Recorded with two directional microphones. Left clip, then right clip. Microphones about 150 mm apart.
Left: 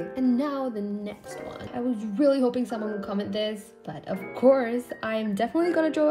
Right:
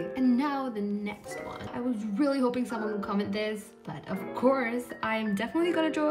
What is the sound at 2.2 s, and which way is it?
Music, 5° right (ahead or behind).